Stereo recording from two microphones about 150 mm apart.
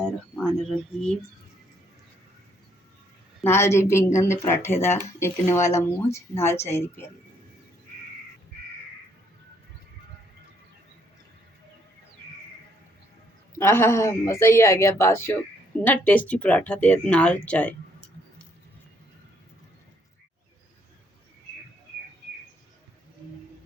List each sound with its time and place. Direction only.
0.0 s a sound: 5° left (ahead or behind)
3.4 s speech: 15° left (ahead or behind)
13.6 s speech: 15° left (ahead or behind)